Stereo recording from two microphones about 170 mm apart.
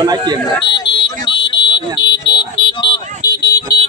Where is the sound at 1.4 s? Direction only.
90° left.